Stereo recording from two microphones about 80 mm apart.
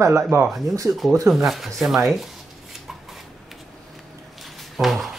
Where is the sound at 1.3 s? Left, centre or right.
Centre.